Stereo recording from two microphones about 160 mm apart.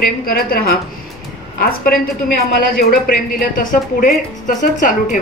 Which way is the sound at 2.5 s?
65° left (ahead or behind).